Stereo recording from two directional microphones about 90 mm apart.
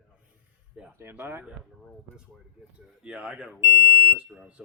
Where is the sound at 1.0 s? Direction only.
25° right (ahead or behind).